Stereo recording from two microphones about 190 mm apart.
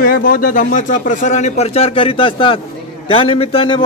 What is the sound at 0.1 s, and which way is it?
A man's voice, 50° left (ahead or behind).